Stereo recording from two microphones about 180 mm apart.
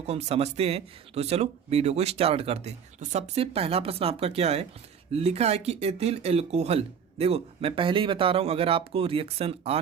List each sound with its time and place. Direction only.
0.0 s speech: 35° right (ahead or behind)